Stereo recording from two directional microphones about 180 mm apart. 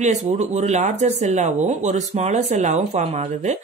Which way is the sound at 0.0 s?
40° right (ahead or behind).